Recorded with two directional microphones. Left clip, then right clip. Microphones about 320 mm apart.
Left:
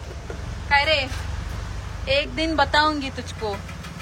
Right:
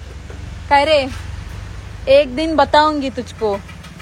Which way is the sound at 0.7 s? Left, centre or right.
Centre.